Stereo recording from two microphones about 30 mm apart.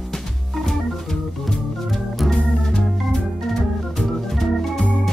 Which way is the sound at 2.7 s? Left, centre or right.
Centre.